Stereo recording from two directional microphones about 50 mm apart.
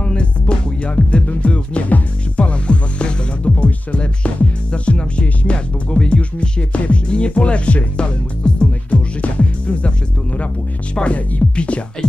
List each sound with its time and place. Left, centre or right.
0.0 s music: left